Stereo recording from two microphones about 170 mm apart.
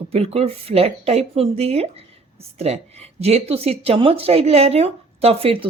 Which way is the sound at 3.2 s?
35° right (ahead or behind).